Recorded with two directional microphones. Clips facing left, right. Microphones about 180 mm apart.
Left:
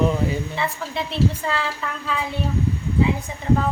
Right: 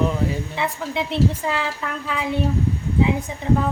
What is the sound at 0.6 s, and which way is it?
A woman's voice, 20° right (ahead or behind).